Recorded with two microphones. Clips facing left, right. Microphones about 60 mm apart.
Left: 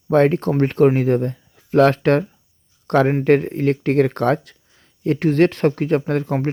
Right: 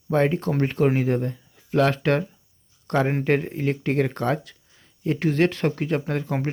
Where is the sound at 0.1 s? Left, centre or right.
Left.